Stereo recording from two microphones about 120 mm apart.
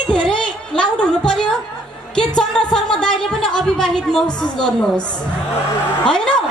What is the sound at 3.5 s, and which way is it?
A woman's voice, 5° left (ahead or behind).